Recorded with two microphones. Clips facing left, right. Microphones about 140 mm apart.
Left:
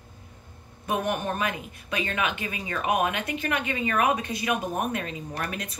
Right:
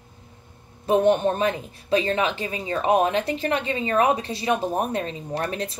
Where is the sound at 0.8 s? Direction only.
30° right (ahead or behind).